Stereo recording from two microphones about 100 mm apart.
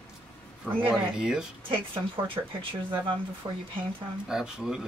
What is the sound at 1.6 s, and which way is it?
Speech, 60° right (ahead or behind).